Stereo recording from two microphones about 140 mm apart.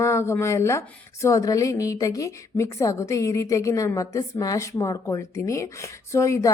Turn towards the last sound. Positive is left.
turn(degrees=20)  # may be behind; listen again after turning